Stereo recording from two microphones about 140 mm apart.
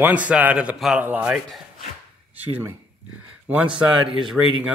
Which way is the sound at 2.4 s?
15° right (ahead or behind).